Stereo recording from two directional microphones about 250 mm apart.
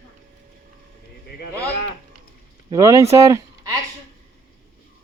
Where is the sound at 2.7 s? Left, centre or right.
Centre.